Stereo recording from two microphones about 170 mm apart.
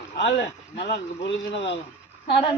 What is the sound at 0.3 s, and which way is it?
Speech, 75° left (ahead or behind).